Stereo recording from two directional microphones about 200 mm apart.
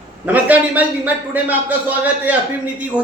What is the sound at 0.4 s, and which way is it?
Speech, 5° right (ahead or behind).